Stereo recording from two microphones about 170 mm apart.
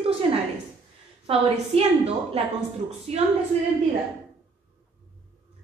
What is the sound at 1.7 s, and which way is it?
Speech, 35° right (ahead or behind).